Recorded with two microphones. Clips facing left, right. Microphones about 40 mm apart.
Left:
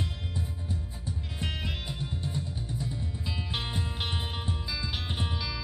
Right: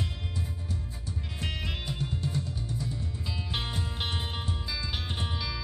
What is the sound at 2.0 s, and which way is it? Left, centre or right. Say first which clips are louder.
Music: right 2 dB; centre.